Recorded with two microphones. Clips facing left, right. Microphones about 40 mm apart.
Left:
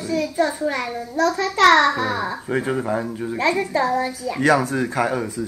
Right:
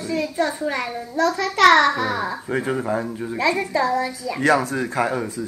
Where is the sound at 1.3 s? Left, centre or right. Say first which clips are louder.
Even; right.